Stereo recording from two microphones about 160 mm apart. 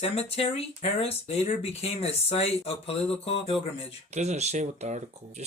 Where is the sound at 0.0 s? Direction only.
40° left (ahead or behind).